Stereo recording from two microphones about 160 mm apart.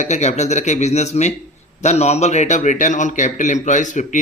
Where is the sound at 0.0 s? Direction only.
45° left (ahead or behind).